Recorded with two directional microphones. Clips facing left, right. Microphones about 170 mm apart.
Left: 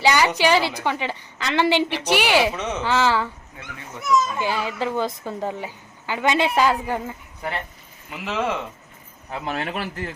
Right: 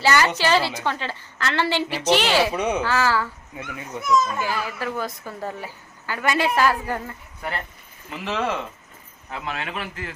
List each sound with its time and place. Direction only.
0.0 s a woman's voice: 15° left (ahead or behind)
2.6 s speech: 15° right (ahead or behind)
2.8 s a woman's voice: 20° left (ahead or behind)
4.4 s a woman's voice: 20° left (ahead or behind)
8.2 s speech: 5° left (ahead or behind)
9.3 s a man's voice: 35° left (ahead or behind)